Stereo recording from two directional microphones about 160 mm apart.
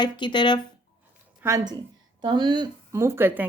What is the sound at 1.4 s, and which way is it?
A woman's voice, 20° right (ahead or behind).